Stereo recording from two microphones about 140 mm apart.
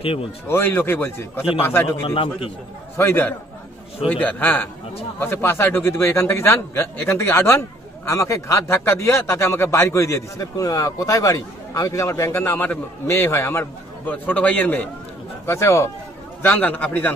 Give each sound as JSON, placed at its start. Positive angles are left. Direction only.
{"t": 0.0, "sound": "a man's voice", "side_deg": 40}
{"t": 0.5, "sound": "a man's voice", "side_deg": 15}
{"t": 2.0, "sound": "a man's voice", "side_deg": 40}
{"t": 3.0, "sound": "a man's voice", "side_deg": 15}